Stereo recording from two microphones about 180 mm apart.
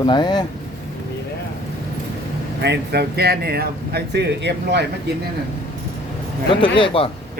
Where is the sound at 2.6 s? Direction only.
70° right (ahead or behind).